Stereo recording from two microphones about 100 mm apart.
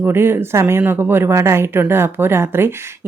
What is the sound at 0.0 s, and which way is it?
Speech, 25° right (ahead or behind).